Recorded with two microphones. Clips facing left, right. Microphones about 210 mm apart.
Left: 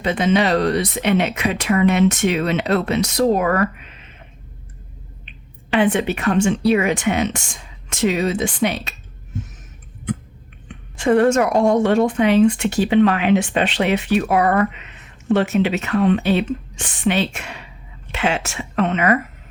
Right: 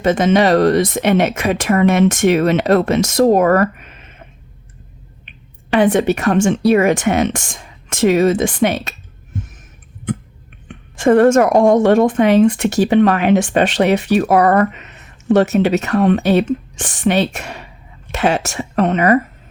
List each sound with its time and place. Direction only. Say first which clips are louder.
0.0 s a woman's voice: right 5 dB; 45° right (ahead or behind)
5.7 s a woman's voice: right 4 dB; 40° right (ahead or behind)
10.7 s a woman's voice: right 4 dB; 50° right (ahead or behind); by 19.2 s 35° right (ahead or behind)